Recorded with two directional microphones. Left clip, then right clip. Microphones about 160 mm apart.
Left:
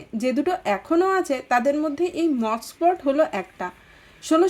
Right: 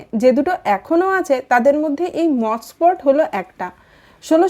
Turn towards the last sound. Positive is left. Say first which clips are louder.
# right 5 dB
turn(degrees=-25)  # may be behind; listen again after turning